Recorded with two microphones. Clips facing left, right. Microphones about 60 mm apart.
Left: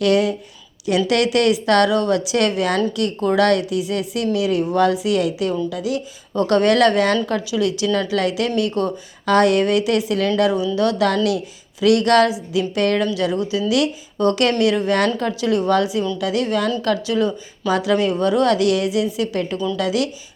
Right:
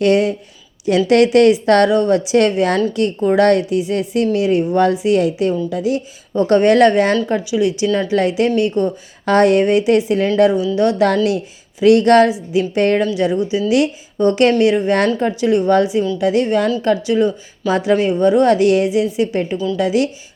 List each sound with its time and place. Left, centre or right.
0.0 s a woman's voice: right